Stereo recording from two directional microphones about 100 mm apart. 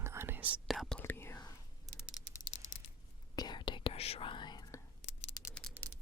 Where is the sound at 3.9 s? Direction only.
90° left; by 4.6 s 50° left (ahead or behind).